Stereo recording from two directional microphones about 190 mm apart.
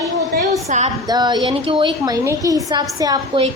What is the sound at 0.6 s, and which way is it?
Speech, 35° right (ahead or behind).